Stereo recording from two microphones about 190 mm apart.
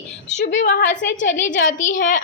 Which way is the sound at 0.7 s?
50° left (ahead or behind).